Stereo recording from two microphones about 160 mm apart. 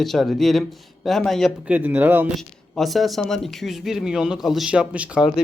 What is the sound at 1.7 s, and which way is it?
Speech, 10° right (ahead or behind).